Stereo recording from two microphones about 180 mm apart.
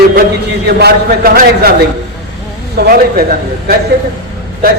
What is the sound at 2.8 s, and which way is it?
Speech, 60° right (ahead or behind).